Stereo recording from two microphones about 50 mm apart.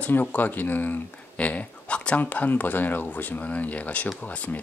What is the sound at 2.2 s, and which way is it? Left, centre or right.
Speech, left.